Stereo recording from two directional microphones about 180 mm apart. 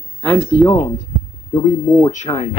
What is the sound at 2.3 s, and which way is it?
Speech, 20° left (ahead or behind).